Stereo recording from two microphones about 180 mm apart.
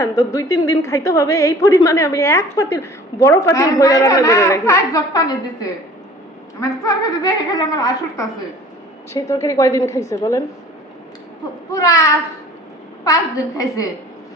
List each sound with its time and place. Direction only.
0.0 s a woman's voice: 20° left (ahead or behind)
11.7 s a woman's voice: 20° left (ahead or behind)
13.6 s a woman's voice: 20° left (ahead or behind)